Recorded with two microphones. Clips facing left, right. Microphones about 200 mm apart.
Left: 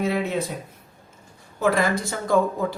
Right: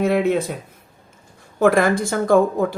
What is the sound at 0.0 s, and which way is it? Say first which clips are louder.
Speech: right 7 dB; 55° right (ahead or behind).